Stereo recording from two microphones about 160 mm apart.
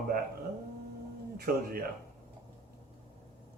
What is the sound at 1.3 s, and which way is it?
Speech, 70° right (ahead or behind).